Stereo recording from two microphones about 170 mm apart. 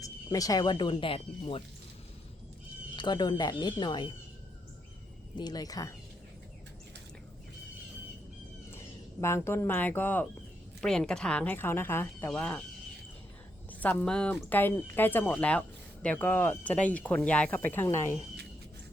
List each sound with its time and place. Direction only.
0.0 s speech: 20° left (ahead or behind)
2.9 s speech: 25° left (ahead or behind)
5.4 s speech: 25° left (ahead or behind)
9.2 s speech: 15° left (ahead or behind)
13.7 s speech: 10° left (ahead or behind)